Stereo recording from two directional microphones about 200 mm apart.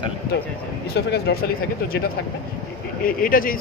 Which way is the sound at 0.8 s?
55° left (ahead or behind).